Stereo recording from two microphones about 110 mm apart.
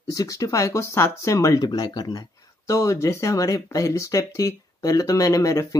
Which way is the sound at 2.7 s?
25° left (ahead or behind).